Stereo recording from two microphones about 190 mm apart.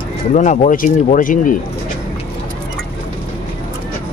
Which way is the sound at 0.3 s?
40° left (ahead or behind).